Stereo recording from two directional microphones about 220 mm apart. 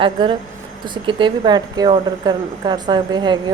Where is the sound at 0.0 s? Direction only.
20° right (ahead or behind).